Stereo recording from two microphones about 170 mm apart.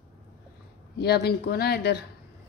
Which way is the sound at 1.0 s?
70° left (ahead or behind).